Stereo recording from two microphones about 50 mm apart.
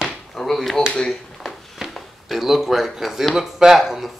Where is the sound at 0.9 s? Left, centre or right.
Centre.